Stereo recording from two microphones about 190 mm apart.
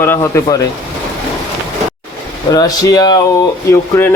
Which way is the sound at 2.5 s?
20° left (ahead or behind).